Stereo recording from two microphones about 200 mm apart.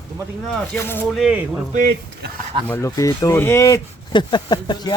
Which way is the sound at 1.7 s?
50° right (ahead or behind).